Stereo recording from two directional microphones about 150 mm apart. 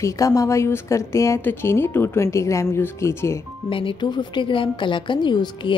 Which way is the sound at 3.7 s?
35° left (ahead or behind).